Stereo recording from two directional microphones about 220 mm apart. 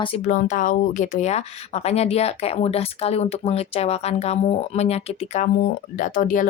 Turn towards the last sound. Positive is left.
turn(degrees=35)  # may be behind; listen again after turning